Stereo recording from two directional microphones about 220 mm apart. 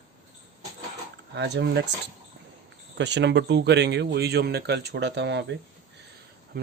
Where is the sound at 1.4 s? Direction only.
50° right (ahead or behind).